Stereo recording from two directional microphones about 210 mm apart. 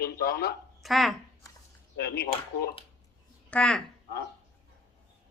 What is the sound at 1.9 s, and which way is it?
Speech, 50° left (ahead or behind).